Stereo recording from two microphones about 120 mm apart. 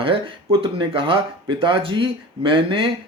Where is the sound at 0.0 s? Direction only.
45° right (ahead or behind).